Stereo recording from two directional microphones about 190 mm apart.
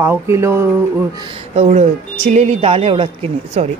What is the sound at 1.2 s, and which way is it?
A woman's voice, 30° right (ahead or behind).